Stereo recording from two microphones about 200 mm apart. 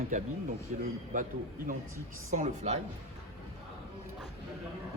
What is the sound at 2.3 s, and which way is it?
Speech, 35° right (ahead or behind).